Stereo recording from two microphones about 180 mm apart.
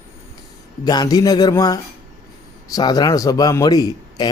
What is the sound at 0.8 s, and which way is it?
Speech, 20° left (ahead or behind).